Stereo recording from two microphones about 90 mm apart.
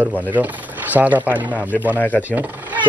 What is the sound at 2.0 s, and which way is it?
Speech, 20° left (ahead or behind).